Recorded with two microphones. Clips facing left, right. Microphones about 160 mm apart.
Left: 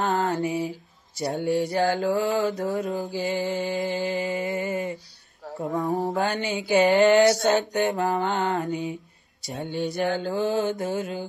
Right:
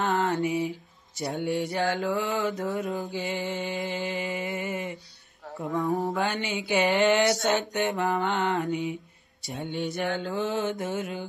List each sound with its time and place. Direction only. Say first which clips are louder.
0.0 s mantra: left 1 dB; 25° left (ahead or behind)
0.3 s mantra: left 1 dB; 35° left (ahead or behind)
5.7 s mantra: left 1 dB; 20° left (ahead or behind)
6.1 s mantra: left 3 dB; 40° left (ahead or behind)